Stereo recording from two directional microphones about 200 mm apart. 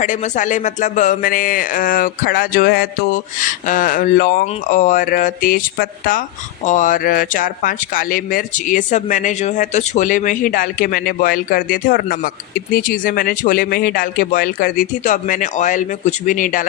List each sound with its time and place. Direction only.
0.0 s speech: 40° left (ahead or behind)